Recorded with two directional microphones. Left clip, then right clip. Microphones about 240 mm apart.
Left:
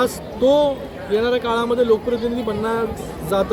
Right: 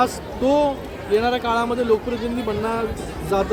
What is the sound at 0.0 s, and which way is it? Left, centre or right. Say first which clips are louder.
Speech: left 2 dB; centre.